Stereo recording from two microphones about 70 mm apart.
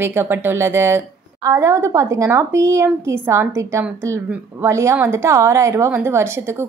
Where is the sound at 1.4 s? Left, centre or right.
Right.